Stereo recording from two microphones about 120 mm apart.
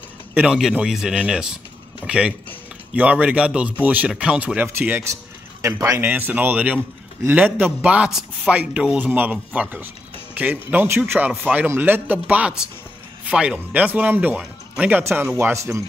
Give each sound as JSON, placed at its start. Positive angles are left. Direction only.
{"t": 0.3, "sound": "a man's voice", "side_deg": -10}